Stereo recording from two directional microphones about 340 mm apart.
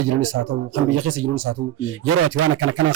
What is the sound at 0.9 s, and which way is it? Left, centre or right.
A man's voice, right.